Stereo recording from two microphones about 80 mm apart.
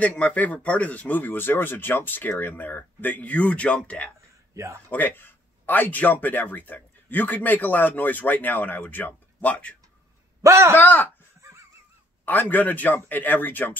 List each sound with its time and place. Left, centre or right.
0.2 s speech: centre
10.4 s a man's voice: right
10.8 s speech: left
12.3 s speech: left